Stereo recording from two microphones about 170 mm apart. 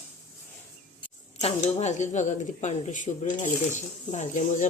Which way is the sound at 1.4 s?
40° left (ahead or behind).